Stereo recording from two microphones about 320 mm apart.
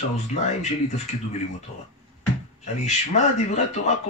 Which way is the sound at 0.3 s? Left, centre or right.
Left.